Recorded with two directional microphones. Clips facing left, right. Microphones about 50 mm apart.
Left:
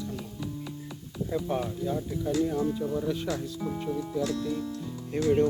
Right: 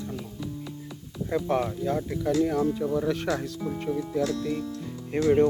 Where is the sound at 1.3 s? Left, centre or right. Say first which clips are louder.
Right 4 dB; right.